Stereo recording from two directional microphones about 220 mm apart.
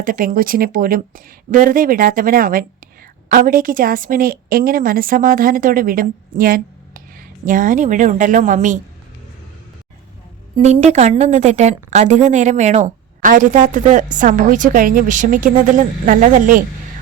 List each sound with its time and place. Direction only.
0.0 s a woman's voice: 40° right (ahead or behind)
10.6 s a woman's voice: 30° right (ahead or behind)